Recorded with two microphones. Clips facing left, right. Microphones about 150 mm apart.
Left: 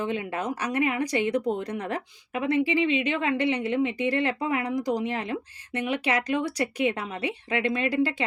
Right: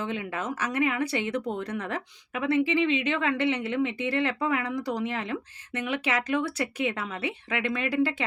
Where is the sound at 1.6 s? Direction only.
35° left (ahead or behind).